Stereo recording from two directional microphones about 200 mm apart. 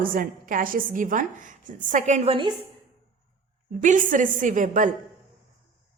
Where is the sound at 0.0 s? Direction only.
45° right (ahead or behind); by 2.5 s 30° right (ahead or behind).